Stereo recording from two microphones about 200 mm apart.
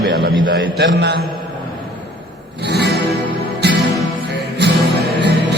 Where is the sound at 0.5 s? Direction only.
55° right (ahead or behind).